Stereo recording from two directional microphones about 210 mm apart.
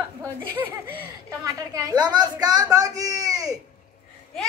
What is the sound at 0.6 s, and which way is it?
Speech, 10° right (ahead or behind).